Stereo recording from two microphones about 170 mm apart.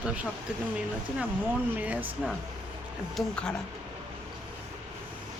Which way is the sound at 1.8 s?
10° right (ahead or behind).